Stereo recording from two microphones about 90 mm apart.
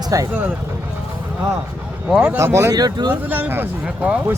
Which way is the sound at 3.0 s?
20° right (ahead or behind).